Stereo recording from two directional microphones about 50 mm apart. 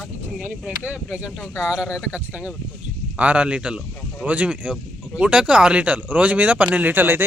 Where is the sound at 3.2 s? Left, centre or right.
Right.